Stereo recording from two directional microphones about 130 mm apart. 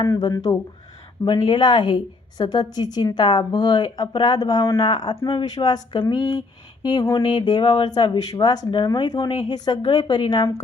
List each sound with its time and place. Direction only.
0.2 s speech: 30° left (ahead or behind)
1.2 s speech: 40° left (ahead or behind)
7.6 s speech: 50° left (ahead or behind)
7.9 s speech: 35° left (ahead or behind)